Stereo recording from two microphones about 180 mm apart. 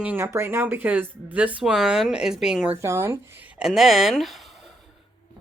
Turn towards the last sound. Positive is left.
turn(degrees=0)  # may be behind; listen again after turning